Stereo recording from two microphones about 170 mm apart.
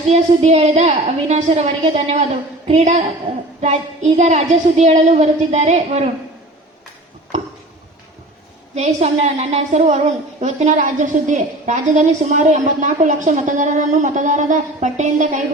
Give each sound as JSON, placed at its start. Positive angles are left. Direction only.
{"t": 0.1, "sound": "a woman's voice", "side_deg": -40}
{"t": 8.7, "sound": "a woman's voice", "side_deg": -40}